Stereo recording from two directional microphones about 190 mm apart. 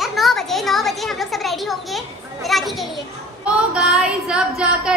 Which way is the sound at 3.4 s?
5° right (ahead or behind).